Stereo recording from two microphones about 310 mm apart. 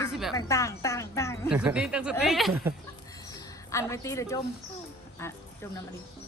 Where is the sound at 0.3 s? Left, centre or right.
Centre.